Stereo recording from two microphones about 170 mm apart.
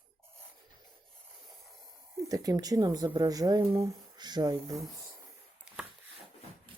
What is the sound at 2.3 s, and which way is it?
Speech, 20° right (ahead or behind).